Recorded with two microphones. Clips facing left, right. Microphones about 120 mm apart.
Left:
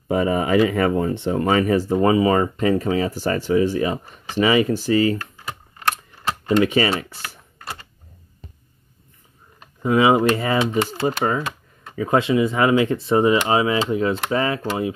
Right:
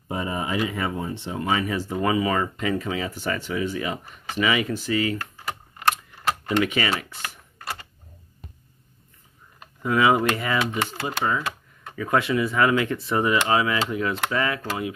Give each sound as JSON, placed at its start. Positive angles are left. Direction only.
{"t": 0.1, "sound": "speech", "side_deg": 85}
{"t": 6.6, "sound": "speech", "side_deg": 30}
{"t": 9.8, "sound": "speech", "side_deg": 25}
{"t": 11.9, "sound": "speech", "side_deg": 25}